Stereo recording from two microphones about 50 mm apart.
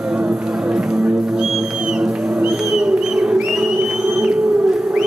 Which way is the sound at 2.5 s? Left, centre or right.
Centre.